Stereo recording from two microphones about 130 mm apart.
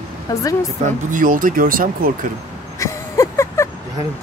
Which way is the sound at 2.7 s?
25° left (ahead or behind).